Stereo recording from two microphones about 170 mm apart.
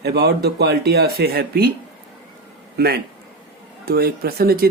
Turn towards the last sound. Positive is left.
turn(degrees=-65)  # may be behind; listen again after turning